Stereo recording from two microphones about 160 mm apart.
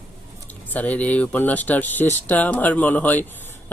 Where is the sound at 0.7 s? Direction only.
10° left (ahead or behind).